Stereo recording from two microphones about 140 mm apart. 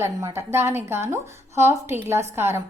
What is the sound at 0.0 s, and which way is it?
Speech, 20° right (ahead or behind).